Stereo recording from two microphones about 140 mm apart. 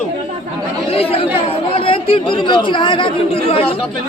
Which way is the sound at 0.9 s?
45° left (ahead or behind).